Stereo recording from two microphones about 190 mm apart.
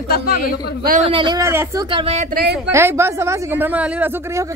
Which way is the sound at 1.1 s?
25° right (ahead or behind).